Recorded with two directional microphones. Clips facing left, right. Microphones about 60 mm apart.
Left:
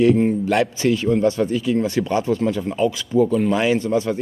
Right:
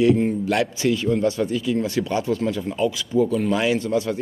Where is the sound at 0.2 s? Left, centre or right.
Left.